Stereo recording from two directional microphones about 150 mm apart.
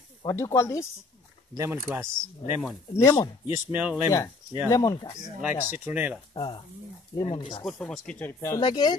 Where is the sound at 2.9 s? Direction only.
25° left (ahead or behind).